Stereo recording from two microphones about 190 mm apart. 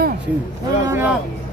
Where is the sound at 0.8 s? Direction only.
10° right (ahead or behind).